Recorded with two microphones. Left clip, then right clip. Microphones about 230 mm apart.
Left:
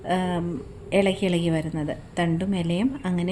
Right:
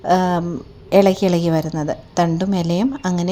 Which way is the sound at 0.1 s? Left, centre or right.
Right.